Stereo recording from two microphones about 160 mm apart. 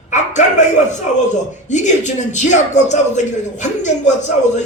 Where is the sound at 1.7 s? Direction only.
50° left (ahead or behind).